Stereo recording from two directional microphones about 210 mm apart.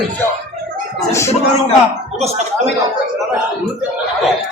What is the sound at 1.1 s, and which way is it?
Speech, 15° left (ahead or behind).